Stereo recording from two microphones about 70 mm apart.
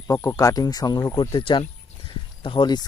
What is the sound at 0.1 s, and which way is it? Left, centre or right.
Speech, left.